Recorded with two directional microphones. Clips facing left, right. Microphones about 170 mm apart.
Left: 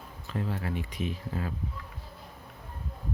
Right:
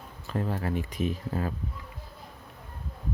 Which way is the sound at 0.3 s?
45° right (ahead or behind).